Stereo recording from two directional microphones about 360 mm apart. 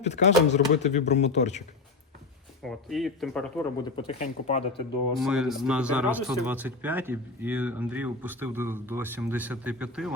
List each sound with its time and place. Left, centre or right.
0.0 s a man's voice: centre
2.6 s speech: centre
3.9 s speech: centre
5.1 s speech: centre